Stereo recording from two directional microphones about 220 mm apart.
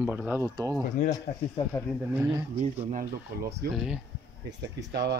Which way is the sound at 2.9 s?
40° right (ahead or behind).